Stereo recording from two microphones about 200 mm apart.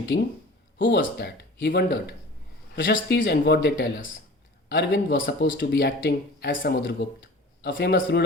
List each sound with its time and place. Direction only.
0.1 s speech: 70° left (ahead or behind)